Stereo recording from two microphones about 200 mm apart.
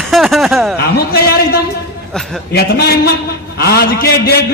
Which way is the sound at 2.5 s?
55° left (ahead or behind).